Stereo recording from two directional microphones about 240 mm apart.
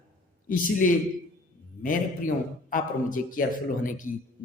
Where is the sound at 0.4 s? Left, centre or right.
Left.